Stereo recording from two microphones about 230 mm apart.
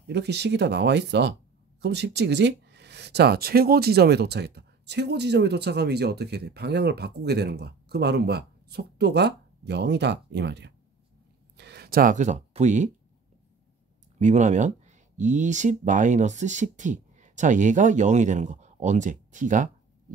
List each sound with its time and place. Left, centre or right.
0.0 s speech: right
14.2 s speech: right